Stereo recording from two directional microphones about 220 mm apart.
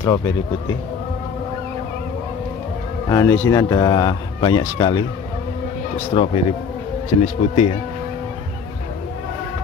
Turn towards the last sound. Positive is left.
turn(degrees=30)  # may be behind; listen again after turning